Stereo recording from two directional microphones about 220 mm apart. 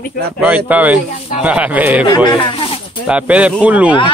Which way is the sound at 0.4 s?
5° right (ahead or behind).